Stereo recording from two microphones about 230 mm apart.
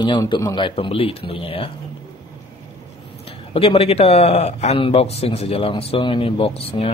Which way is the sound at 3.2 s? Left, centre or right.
Left.